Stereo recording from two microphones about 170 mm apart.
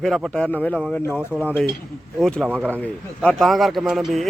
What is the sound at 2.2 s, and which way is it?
Speech, 5° left (ahead or behind).